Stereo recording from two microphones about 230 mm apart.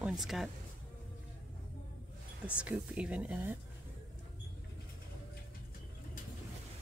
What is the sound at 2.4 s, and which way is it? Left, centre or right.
Speech, centre.